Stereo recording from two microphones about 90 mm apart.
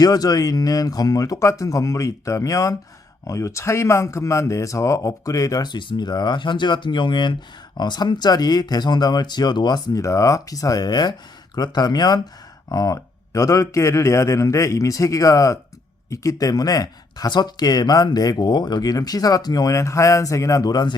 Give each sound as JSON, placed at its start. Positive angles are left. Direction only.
{"t": 0.0, "sound": "a man's voice", "side_deg": 45}
{"t": 5.7, "sound": "speech", "side_deg": 55}
{"t": 10.0, "sound": "a man's voice", "side_deg": 35}
{"t": 12.6, "sound": "a man's voice", "side_deg": 40}